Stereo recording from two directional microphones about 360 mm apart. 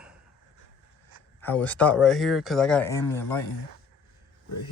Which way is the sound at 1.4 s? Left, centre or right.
Centre.